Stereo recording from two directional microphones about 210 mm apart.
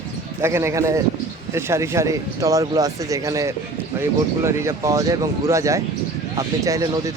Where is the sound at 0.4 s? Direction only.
10° right (ahead or behind).